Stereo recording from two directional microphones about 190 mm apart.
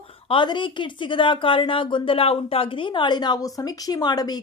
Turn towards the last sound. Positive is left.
turn(degrees=20)  # may be behind; listen again after turning